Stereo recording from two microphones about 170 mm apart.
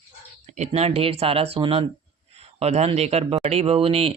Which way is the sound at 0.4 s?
45° right (ahead or behind).